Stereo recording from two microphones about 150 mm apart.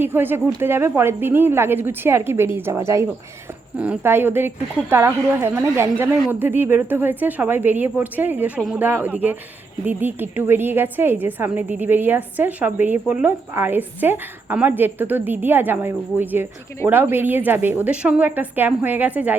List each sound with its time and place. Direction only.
0.0 s a woman's voice: 15° right (ahead or behind)